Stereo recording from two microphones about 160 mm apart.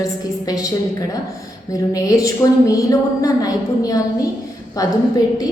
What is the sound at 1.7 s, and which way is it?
A woman's voice, 20° left (ahead or behind).